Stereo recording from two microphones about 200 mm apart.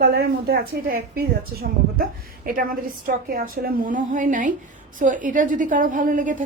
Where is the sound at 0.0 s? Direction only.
50° right (ahead or behind).